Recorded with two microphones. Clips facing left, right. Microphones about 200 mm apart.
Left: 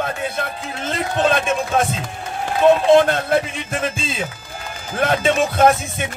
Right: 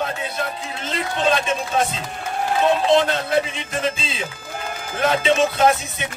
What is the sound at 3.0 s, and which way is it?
Music, 50° left (ahead or behind).